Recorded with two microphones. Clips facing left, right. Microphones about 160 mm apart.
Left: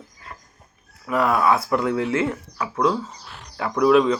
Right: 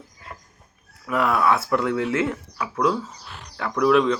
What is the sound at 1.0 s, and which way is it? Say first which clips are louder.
Speech: left 1 dB; 5° left (ahead or behind).